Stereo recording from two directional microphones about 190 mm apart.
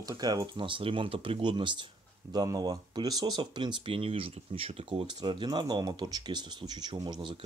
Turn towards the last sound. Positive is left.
turn(degrees=-25)  # may be behind; listen again after turning